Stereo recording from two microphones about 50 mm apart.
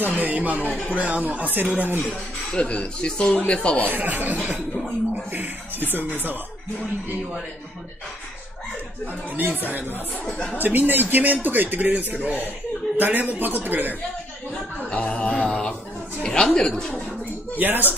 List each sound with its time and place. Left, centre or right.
0.0 s speech: right
2.6 s speech: left
3.9 s speech: right
4.4 s a sound: centre
5.3 s speech: right
9.3 s speech: right
10.3 s speech: left
10.6 s speech: right
14.9 s mantra: left
16.2 s a woman's voice: centre
17.6 s speech: right